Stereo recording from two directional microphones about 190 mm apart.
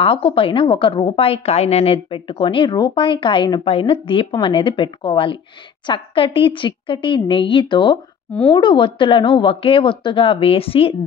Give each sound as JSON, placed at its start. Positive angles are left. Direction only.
{"t": 0.0, "sound": "a woman's voice", "side_deg": 30}
{"t": 8.3, "sound": "speech", "side_deg": 5}
{"t": 8.5, "sound": "a woman's voice", "side_deg": 25}